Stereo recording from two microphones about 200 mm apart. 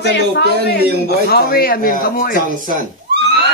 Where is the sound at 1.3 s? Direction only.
50° left (ahead or behind).